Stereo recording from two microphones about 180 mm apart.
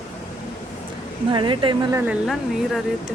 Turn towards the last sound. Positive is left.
turn(degrees=0)  # may be behind; listen again after turning